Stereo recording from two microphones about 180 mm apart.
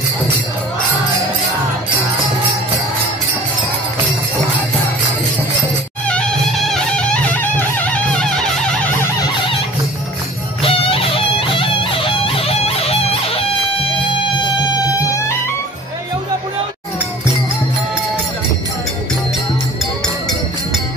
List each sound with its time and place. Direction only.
6.0 s music: 5° left (ahead or behind)
10.6 s music: 30° left (ahead or behind)